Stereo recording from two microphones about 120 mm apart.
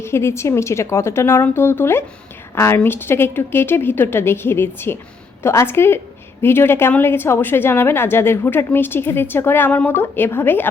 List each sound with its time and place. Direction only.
0.0 s a woman's voice: 20° left (ahead or behind)